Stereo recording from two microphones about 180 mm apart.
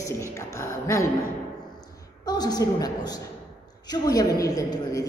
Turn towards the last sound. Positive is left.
turn(degrees=20)  # may be behind; listen again after turning